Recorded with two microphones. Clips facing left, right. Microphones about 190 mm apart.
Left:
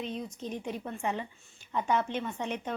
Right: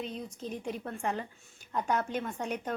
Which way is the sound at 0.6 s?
5° left (ahead or behind).